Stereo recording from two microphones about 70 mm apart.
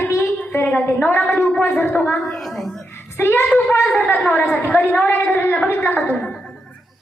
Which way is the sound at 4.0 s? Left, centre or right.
Centre.